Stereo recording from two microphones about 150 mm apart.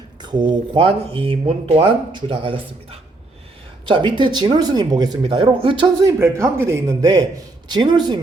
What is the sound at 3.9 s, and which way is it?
Speech, 30° right (ahead or behind).